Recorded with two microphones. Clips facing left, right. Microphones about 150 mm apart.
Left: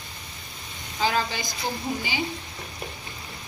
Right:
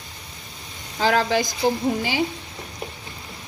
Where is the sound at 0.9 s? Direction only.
75° right (ahead or behind).